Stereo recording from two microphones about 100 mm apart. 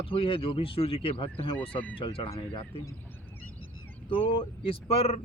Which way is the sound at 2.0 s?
60° left (ahead or behind).